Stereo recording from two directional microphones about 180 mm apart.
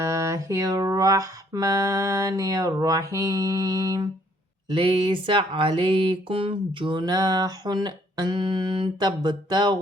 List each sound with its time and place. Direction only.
0.0 s speech: 15° right (ahead or behind)